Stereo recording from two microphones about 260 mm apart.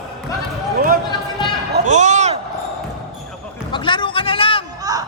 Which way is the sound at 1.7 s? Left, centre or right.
Right.